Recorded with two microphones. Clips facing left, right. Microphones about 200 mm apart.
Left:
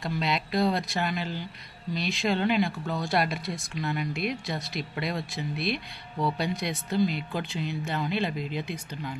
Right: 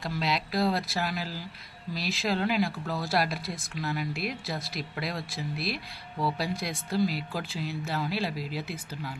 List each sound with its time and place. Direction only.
0.0 s speech: centre (ahead or behind)